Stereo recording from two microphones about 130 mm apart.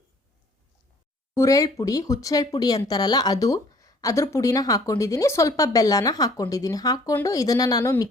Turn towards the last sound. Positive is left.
turn(degrees=30)  # may be behind; listen again after turning